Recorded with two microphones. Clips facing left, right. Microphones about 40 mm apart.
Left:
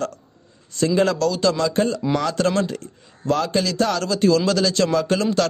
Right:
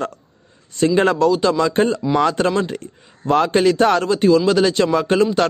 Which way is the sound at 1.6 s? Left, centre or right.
Right.